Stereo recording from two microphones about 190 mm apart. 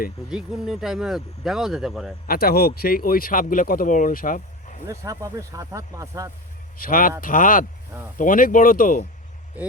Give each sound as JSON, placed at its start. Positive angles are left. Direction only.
{"t": 0.3, "sound": "speech", "side_deg": -5}
{"t": 2.2, "sound": "speech", "side_deg": 50}
{"t": 4.9, "sound": "speech", "side_deg": -15}
{"t": 6.7, "sound": "speech", "side_deg": 50}
{"t": 9.5, "sound": "speech", "side_deg": -10}